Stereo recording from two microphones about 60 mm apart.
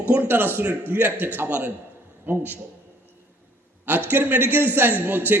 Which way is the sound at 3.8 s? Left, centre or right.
Right.